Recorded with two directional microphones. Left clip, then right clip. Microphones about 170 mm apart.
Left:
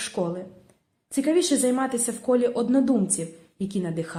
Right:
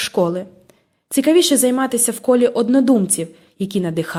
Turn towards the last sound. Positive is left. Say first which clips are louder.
# right 9 dB
turn(degrees=-45)  # may be behind; listen again after turning